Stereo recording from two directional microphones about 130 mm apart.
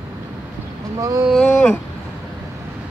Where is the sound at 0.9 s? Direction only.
25° right (ahead or behind).